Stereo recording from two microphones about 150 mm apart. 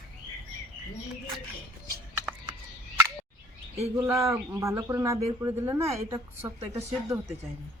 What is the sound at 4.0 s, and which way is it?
Speech, 20° right (ahead or behind).